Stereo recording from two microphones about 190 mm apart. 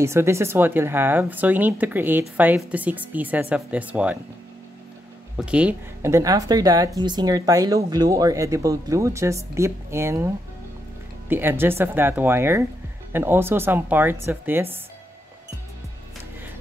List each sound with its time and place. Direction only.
0.0 s speech: 15° right (ahead or behind)
5.4 s speech: 5° right (ahead or behind)